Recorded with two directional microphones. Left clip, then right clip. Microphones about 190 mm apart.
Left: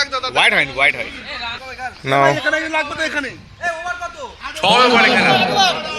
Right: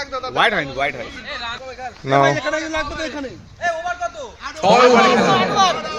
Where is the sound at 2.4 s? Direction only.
35° left (ahead or behind).